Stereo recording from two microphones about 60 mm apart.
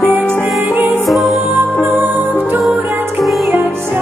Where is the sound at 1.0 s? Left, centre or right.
Centre.